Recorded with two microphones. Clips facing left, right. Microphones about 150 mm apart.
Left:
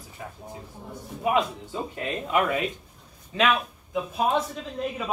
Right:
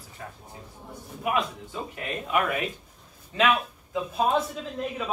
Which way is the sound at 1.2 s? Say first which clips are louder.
Left 3 dB; 30° left (ahead or behind).